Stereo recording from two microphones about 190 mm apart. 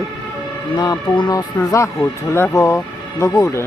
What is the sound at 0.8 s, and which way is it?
Speech, 20° left (ahead or behind).